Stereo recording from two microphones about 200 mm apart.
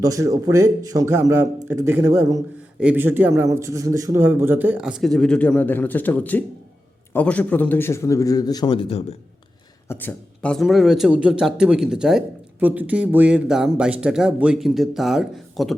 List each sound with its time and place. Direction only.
0.0 s a man's voice: 15° right (ahead or behind); by 9.1 s 30° left (ahead or behind)
9.9 s a man's voice: 10° left (ahead or behind)